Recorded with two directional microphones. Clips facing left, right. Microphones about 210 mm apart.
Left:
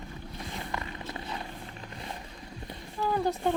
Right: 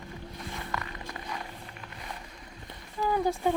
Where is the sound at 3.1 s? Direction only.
10° right (ahead or behind).